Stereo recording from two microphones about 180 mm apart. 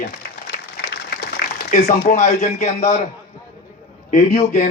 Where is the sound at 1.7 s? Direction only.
40° left (ahead or behind).